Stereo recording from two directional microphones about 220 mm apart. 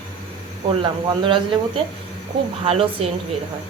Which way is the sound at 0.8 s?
20° right (ahead or behind).